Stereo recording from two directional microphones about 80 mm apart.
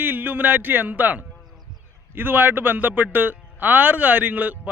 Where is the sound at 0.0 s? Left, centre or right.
Right.